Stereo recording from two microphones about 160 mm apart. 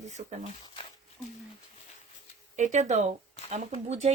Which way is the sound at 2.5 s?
50° right (ahead or behind).